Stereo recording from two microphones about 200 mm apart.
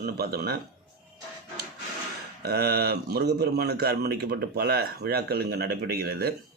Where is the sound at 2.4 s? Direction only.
50° right (ahead or behind).